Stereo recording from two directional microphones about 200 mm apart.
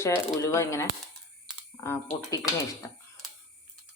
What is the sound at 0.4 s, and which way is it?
Speech, 15° left (ahead or behind).